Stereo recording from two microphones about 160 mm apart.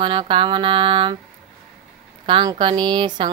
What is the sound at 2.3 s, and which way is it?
Speech, 30° right (ahead or behind).